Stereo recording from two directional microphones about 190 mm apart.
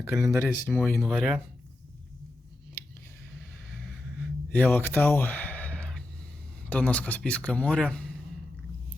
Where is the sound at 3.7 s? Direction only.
Centre (ahead or behind).